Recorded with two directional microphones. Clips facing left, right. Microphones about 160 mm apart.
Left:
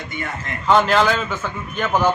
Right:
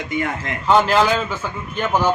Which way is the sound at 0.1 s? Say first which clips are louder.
Right 8 dB; 90° right.